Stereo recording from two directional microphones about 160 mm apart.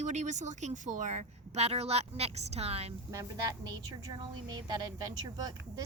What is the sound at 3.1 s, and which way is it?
Speech, 20° right (ahead or behind).